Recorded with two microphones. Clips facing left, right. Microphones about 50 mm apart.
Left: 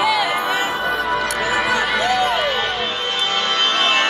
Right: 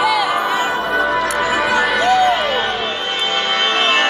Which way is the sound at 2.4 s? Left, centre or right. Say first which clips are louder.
Right 2 dB; centre.